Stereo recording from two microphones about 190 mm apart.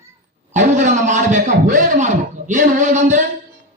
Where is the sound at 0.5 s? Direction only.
40° right (ahead or behind).